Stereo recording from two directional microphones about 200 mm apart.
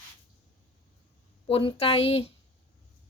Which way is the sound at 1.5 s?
25° left (ahead or behind).